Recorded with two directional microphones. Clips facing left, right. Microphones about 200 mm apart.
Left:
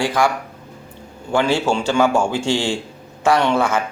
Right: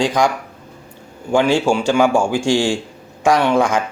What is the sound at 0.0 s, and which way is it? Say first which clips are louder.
Speech: right 2 dB; 15° right (ahead or behind).